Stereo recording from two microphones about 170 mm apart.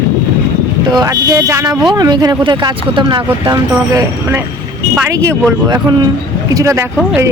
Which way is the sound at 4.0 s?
15° right (ahead or behind).